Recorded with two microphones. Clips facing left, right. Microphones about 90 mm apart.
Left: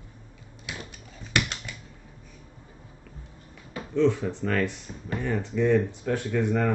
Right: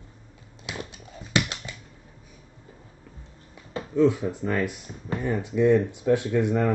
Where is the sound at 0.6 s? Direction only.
25° right (ahead or behind).